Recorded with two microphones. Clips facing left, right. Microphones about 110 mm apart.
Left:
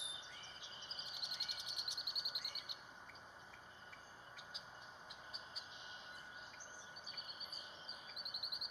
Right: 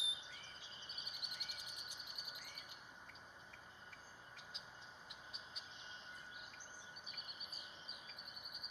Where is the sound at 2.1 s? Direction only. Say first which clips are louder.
Left 2 dB; 15° left (ahead or behind).